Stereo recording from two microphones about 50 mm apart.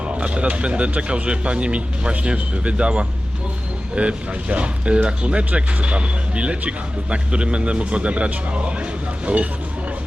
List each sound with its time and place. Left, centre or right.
0.2 s speech: right